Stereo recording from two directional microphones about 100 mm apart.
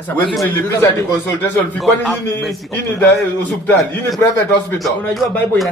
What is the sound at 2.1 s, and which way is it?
Speech, 5° left (ahead or behind).